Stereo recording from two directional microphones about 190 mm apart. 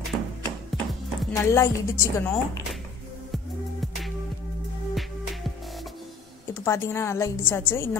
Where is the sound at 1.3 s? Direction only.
15° left (ahead or behind).